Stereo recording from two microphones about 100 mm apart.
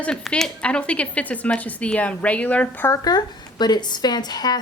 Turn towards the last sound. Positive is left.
turn(degrees=45)  # may be behind; listen again after turning